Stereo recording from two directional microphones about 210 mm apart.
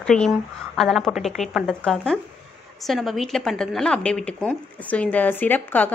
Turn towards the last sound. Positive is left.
turn(degrees=10)  # may be behind; listen again after turning